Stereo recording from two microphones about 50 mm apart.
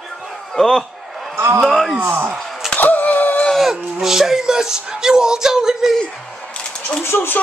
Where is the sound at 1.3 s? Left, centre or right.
Right.